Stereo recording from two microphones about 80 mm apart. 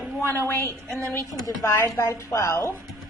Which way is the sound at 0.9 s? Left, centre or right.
Right.